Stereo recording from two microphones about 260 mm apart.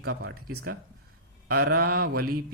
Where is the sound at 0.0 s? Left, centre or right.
Right.